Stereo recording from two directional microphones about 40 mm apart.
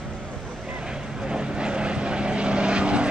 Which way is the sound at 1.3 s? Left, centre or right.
Right.